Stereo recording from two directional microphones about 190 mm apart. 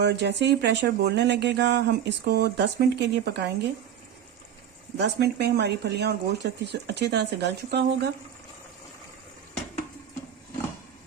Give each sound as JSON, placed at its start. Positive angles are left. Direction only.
{"t": 0.0, "sound": "speech", "side_deg": -60}
{"t": 4.9, "sound": "speech", "side_deg": -60}